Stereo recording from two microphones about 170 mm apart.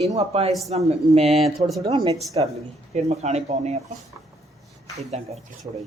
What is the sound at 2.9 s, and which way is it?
Speech, 40° right (ahead or behind).